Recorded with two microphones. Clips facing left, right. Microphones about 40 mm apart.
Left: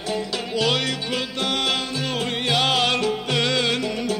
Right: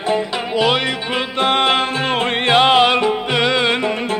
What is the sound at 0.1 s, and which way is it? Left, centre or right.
Music, right.